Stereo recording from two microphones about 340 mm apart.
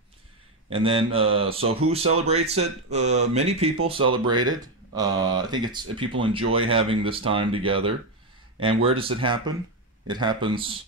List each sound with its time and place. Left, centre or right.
0.7 s speech: centre